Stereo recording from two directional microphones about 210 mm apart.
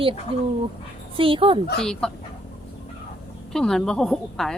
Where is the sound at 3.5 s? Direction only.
Centre (ahead or behind).